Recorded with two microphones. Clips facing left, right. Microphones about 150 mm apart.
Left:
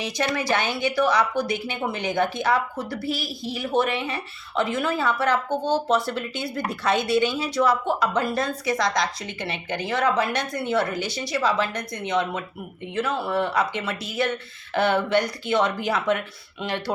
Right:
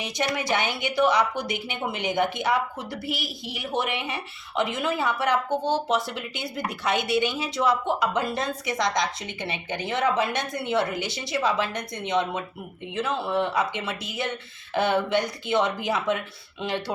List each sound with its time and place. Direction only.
0.3 s a woman's voice: 20° right (ahead or behind)